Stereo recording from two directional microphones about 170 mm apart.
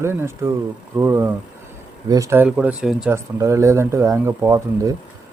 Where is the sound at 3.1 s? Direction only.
15° right (ahead or behind).